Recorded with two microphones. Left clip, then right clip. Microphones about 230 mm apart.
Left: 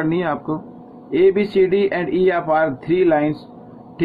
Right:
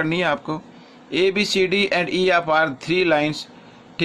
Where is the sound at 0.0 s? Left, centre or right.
Right.